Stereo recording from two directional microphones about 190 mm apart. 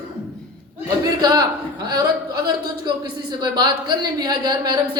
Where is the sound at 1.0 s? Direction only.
20° right (ahead or behind).